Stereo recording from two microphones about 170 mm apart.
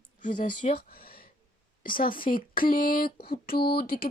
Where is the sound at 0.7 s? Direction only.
60° left (ahead or behind).